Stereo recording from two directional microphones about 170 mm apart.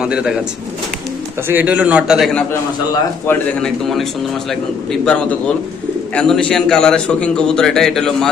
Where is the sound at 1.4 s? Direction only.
10° right (ahead or behind); by 4.0 s 5° left (ahead or behind).